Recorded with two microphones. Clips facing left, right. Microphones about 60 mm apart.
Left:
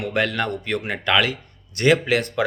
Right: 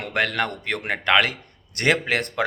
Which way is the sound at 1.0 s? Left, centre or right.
Right.